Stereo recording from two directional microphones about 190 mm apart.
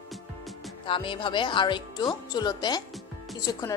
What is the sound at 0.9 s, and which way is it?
A woman's voice, 25° left (ahead or behind).